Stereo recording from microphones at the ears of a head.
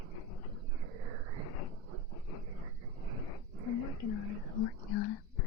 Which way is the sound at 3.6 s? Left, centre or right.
Left.